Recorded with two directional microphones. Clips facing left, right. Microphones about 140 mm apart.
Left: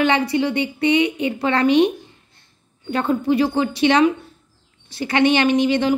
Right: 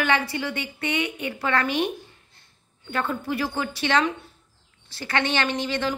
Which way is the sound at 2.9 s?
20° left (ahead or behind).